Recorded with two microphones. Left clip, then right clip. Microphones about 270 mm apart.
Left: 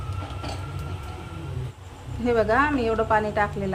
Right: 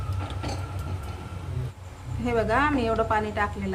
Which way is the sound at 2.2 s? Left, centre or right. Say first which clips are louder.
Left 3 dB; centre.